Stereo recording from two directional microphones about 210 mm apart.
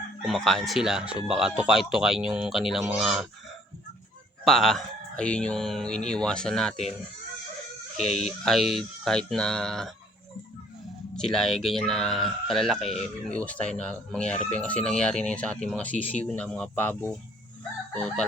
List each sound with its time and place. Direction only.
0.3 s speech: centre (ahead or behind)
4.4 s speech: centre (ahead or behind)
7.9 s speech: 30° left (ahead or behind)
8.4 s speech: centre (ahead or behind)
11.2 s speech: centre (ahead or behind)